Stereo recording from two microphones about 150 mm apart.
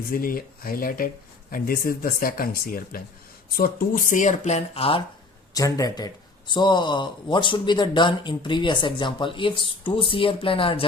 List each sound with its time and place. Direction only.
0.1 s speech: 70° left (ahead or behind); by 5.0 s 40° left (ahead or behind)
5.5 s speech: 20° left (ahead or behind)